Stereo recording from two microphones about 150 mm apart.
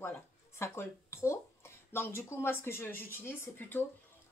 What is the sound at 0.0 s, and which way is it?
Speech, 15° left (ahead or behind).